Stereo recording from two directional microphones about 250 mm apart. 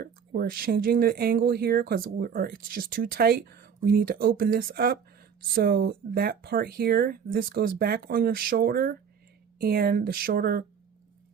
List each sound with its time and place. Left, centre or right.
0.0 s speech: right